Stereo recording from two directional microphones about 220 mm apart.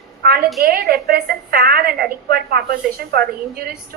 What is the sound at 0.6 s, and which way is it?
A woman's voice, 45° right (ahead or behind).